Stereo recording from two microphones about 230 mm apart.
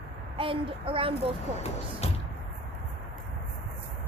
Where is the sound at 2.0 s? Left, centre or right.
Left.